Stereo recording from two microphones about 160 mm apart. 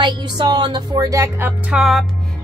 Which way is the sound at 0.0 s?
25° right (ahead or behind).